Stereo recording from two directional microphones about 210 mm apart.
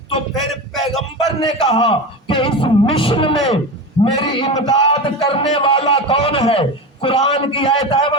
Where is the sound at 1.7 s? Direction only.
25° left (ahead or behind).